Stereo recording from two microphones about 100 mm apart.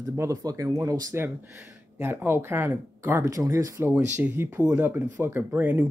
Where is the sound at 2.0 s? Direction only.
25° right (ahead or behind).